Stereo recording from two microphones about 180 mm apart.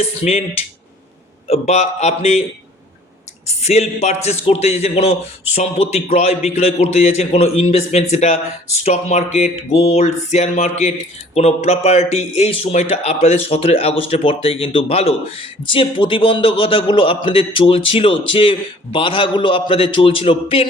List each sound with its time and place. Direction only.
0.0 s speech: 35° left (ahead or behind)
1.5 s speech: 35° left (ahead or behind)
3.6 s a man's voice: 40° left (ahead or behind)